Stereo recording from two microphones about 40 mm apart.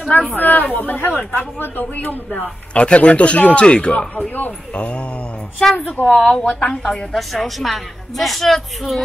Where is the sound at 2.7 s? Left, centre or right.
Left.